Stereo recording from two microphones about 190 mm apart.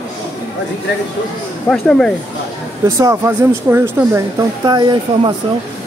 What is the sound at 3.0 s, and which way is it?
Speech, 15° right (ahead or behind).